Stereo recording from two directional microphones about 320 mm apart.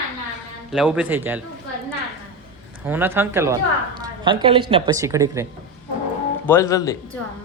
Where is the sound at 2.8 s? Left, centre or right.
Centre.